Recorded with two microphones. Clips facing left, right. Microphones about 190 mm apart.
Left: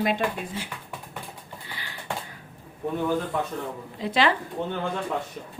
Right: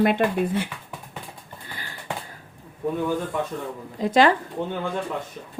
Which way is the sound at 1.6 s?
45° right (ahead or behind).